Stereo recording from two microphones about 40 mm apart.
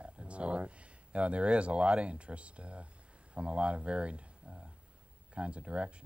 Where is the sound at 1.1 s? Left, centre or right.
Right.